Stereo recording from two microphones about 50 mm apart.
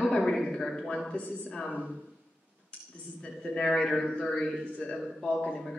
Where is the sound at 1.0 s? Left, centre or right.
Left.